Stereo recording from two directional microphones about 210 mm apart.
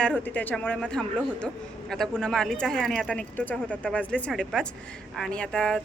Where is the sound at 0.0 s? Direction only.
5° left (ahead or behind).